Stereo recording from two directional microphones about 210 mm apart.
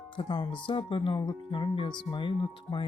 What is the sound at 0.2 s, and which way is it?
Speech, 25° left (ahead or behind).